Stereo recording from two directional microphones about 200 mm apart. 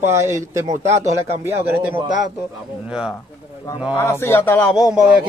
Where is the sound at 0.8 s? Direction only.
35° right (ahead or behind).